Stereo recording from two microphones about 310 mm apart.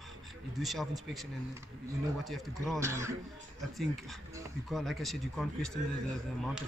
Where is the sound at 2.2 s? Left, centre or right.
Centre.